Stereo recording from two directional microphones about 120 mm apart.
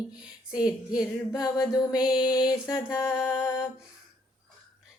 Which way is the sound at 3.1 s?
5° right (ahead or behind).